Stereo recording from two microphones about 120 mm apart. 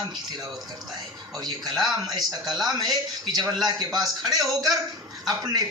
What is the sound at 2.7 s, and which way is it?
A man's voice, 35° right (ahead or behind).